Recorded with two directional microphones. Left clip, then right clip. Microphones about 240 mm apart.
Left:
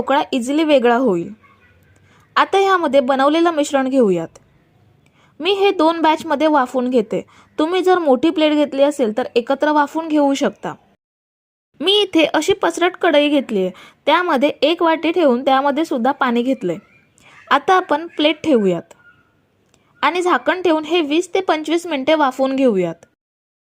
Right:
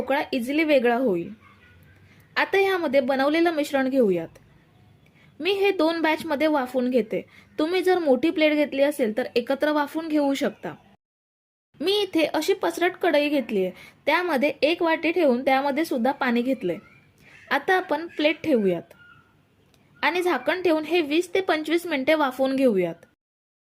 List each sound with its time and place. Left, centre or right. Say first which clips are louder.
0.0 s speech: left 8 dB; left
2.3 s a woman's voice: left 8 dB; centre
11.8 s speech: left 8 dB; left
20.0 s speech: left 7 dB; left